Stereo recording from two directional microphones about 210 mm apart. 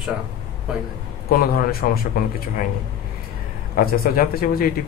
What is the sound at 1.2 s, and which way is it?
Speech, 45° left (ahead or behind).